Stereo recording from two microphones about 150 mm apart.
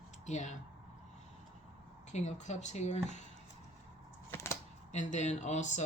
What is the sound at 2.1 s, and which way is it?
Speech, 50° left (ahead or behind).